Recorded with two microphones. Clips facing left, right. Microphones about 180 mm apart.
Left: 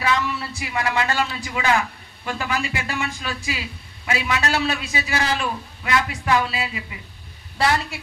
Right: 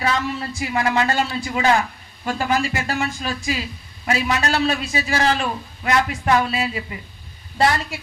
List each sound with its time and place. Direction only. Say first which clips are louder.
0.0 s a man's voice: right 1 dB; 40° right (ahead or behind)